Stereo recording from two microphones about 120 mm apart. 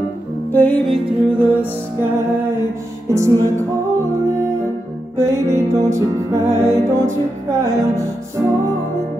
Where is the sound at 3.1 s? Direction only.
25° right (ahead or behind).